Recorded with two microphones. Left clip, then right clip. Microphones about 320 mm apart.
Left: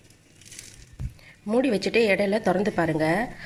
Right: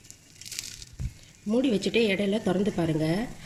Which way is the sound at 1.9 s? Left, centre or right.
Left.